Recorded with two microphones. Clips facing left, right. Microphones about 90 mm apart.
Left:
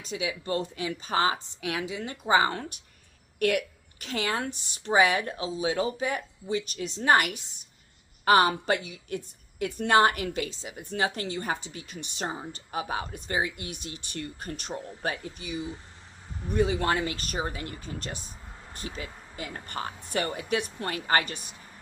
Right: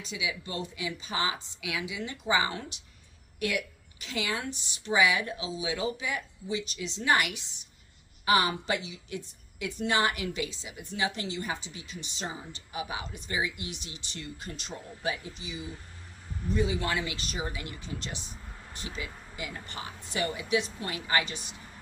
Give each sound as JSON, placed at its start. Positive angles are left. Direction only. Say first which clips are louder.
{"t": 0.0, "sound": "a woman's voice", "louder": "left 3 dB", "side_deg": 45}